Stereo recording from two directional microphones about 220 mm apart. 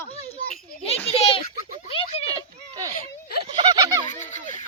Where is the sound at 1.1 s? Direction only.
25° left (ahead or behind).